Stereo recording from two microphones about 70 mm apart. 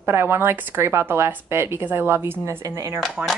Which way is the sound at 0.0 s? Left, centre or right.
Right.